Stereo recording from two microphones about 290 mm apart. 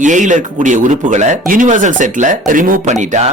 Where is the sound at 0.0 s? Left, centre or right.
Right.